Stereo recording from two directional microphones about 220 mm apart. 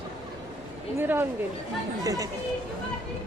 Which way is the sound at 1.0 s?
10° right (ahead or behind).